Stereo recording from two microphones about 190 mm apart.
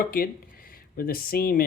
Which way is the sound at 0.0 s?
50° left (ahead or behind).